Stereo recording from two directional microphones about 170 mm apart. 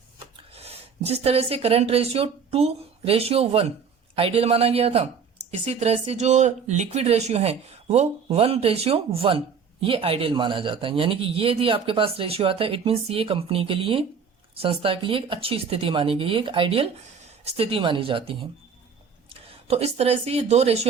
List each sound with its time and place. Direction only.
0.5 s speech: 35° right (ahead or behind)